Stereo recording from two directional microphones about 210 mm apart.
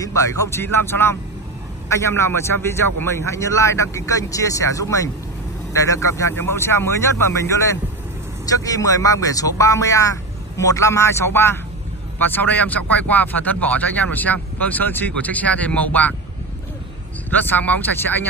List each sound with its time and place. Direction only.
0.0 s speech: 15° left (ahead or behind)
17.3 s speech: 10° left (ahead or behind)